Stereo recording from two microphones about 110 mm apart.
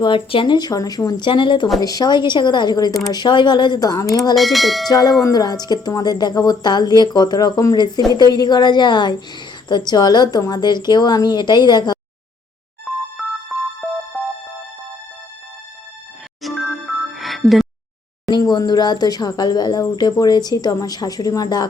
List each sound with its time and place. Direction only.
0.0 s speech: 50° left (ahead or behind); by 4.4 s 35° left (ahead or behind)
4.4 s bell: centre (ahead or behind)
4.9 s speech: 35° left (ahead or behind)
12.8 s music: centre (ahead or behind)
16.4 s music: centre (ahead or behind)
18.3 s speech: 40° left (ahead or behind)